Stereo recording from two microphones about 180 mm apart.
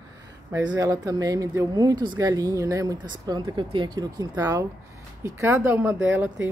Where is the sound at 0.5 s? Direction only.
20° right (ahead or behind).